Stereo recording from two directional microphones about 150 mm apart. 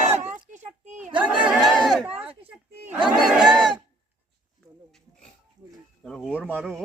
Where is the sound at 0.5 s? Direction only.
50° right (ahead or behind).